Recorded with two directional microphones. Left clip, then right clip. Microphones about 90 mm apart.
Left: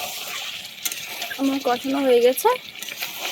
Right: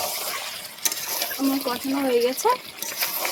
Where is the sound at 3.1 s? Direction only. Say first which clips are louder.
Right 2 dB; 20° right (ahead or behind).